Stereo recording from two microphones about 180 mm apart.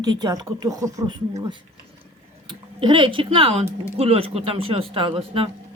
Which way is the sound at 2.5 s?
25° right (ahead or behind).